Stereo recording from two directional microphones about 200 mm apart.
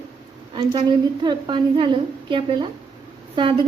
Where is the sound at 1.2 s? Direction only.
25° right (ahead or behind).